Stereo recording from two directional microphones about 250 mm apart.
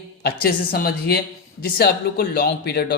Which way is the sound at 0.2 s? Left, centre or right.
Left.